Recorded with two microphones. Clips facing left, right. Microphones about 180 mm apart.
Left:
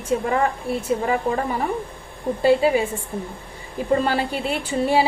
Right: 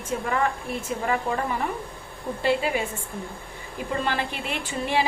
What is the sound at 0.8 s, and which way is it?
Speech, 25° left (ahead or behind).